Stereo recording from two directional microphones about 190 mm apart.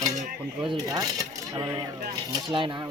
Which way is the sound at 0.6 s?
20° right (ahead or behind).